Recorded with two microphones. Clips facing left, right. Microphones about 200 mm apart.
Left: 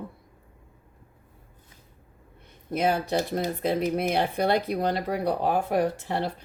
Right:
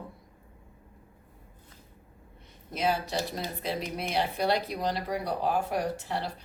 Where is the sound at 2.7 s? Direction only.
55° left (ahead or behind).